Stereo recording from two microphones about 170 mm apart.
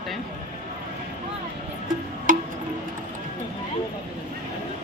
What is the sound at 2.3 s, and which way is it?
Music, 50° right (ahead or behind).